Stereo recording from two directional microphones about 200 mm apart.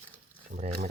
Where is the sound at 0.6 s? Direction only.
40° right (ahead or behind).